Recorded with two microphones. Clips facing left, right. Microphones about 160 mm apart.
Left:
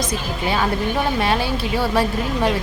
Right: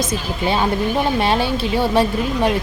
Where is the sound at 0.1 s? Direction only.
25° right (ahead or behind).